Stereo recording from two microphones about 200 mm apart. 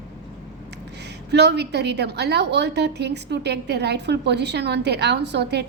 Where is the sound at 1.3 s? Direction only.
55° right (ahead or behind).